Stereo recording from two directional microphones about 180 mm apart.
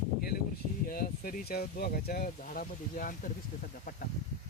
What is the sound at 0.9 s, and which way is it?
Speech, 50° left (ahead or behind).